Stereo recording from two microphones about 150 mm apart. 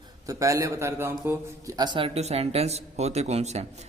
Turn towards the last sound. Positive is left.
turn(degrees=-45)  # may be behind; listen again after turning